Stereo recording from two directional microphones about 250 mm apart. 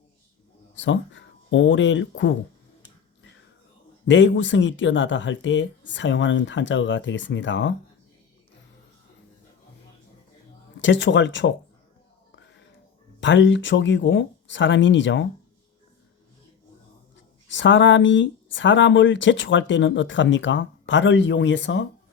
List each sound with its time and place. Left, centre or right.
0.8 s speech: left
4.0 s speech: left
10.8 s speech: left
12.3 s whispering: left
13.1 s speech: left
17.5 s speech: left